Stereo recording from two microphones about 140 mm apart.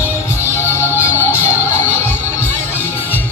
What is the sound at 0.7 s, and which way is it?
Music, 15° left (ahead or behind).